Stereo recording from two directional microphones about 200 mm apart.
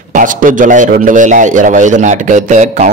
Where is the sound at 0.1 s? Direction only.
40° right (ahead or behind).